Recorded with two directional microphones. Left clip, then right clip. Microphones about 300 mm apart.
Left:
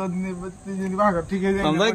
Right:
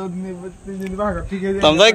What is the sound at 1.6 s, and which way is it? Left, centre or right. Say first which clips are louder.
Speech: right 11 dB; centre.